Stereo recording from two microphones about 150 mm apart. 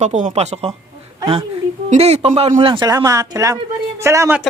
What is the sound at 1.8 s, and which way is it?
A woman's voice, 45° right (ahead or behind).